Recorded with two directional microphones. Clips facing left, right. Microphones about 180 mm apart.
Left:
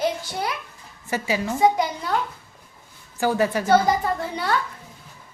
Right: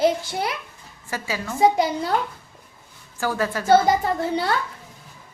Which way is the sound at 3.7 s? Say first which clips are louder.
Right 4 dB; 30° right (ahead or behind).